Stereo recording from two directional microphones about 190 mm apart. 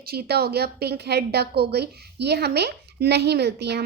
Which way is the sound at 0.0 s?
55° right (ahead or behind).